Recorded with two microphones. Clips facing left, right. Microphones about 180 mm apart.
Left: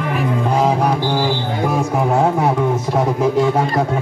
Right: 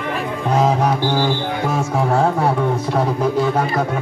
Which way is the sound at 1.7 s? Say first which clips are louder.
Left 1 dB; 15° left (ahead or behind).